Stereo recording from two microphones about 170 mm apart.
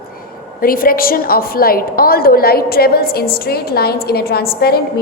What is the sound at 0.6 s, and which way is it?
A woman's voice, 60° left (ahead or behind).